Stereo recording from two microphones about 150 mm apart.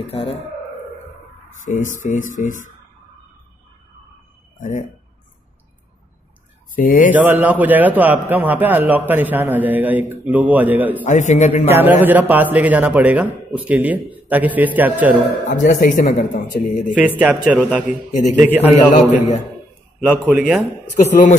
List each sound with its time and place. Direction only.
1.5 s speech: 55° left (ahead or behind)
4.6 s speech: 60° left (ahead or behind)
6.7 s speech: 65° left (ahead or behind)
7.1 s a man's voice: 10° right (ahead or behind)
11.1 s a man's voice: 50° left (ahead or behind)
11.7 s a man's voice: 15° right (ahead or behind)
15.5 s speech: 60° left (ahead or behind); by 16.8 s 80° left
16.9 s a man's voice: 10° right (ahead or behind)
20.0 s a man's voice: 5° right (ahead or behind)
21.0 s speech: 55° left (ahead or behind)